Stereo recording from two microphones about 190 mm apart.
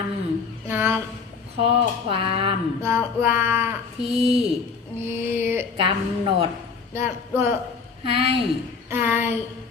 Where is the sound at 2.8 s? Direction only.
10° right (ahead or behind).